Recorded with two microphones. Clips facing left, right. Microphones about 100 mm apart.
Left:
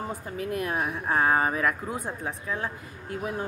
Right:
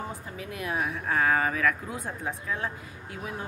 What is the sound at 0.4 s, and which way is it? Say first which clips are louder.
Speech: left 5 dB; 50° left (ahead or behind).